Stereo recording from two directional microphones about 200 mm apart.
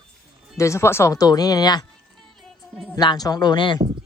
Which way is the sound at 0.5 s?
15° left (ahead or behind).